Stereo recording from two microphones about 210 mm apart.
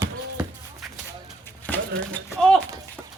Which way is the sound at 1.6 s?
5° left (ahead or behind).